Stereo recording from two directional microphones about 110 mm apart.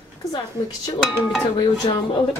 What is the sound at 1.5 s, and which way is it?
Speech, 40° left (ahead or behind).